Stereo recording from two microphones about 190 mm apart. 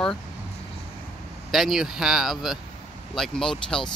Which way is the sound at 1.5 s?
Centre (ahead or behind).